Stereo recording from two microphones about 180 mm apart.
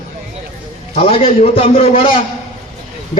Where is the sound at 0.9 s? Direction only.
30° left (ahead or behind).